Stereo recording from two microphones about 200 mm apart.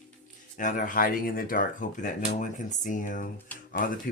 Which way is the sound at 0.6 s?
40° left (ahead or behind).